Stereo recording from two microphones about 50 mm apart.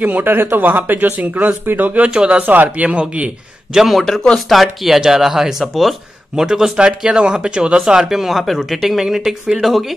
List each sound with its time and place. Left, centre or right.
0.0 s speech: right
2.0 s speech: centre
2.4 s speech: right
3.7 s speech: centre